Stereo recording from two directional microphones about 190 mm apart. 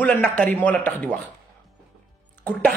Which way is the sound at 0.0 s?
10° left (ahead or behind).